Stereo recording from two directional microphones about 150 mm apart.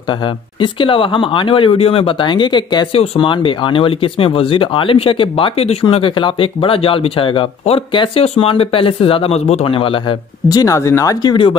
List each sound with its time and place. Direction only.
0.2 s speech: 35° left (ahead or behind)